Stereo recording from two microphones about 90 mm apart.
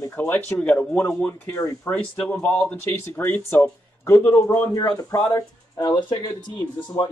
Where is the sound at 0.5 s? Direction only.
10° left (ahead or behind).